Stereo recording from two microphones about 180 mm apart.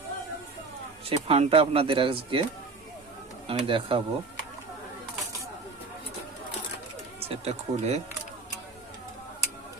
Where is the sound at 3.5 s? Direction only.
30° right (ahead or behind).